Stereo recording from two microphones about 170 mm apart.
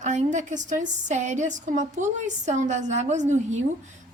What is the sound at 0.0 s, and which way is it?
A woman's voice, 45° right (ahead or behind).